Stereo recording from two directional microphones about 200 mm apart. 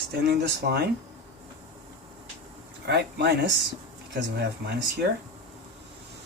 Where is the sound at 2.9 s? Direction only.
55° right (ahead or behind).